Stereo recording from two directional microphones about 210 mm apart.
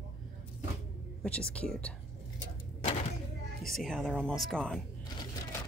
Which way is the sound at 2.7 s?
30° left (ahead or behind).